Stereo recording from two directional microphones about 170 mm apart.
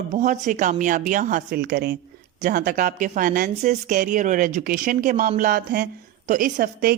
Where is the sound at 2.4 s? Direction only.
55° right (ahead or behind).